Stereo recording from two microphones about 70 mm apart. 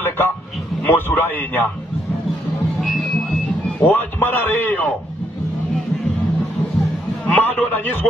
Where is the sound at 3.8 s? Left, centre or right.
Left.